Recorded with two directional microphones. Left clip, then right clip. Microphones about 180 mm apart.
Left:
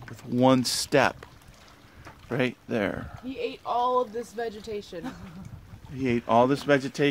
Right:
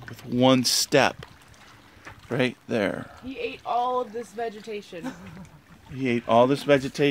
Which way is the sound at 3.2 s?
10° right (ahead or behind).